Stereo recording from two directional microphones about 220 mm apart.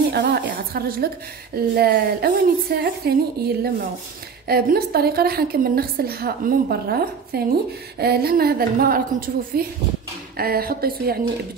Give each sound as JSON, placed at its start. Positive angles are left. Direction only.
{"t": 0.1, "sound": "a woman's voice", "side_deg": -45}